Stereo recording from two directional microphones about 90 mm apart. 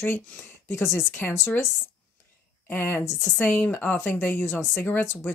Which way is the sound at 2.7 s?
25° left (ahead or behind).